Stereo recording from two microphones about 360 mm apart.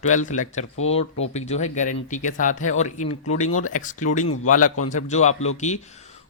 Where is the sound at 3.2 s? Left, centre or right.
Left.